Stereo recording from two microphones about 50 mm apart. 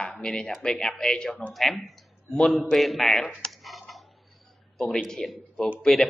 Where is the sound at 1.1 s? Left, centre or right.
Centre.